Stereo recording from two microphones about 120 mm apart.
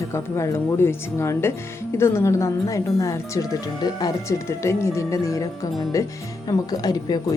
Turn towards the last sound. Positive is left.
turn(degrees=35)  # may be behind; listen again after turning